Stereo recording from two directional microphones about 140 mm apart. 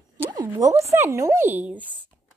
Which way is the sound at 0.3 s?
25° right (ahead or behind).